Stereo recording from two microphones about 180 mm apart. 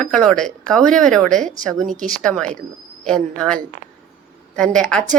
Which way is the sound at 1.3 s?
45° right (ahead or behind).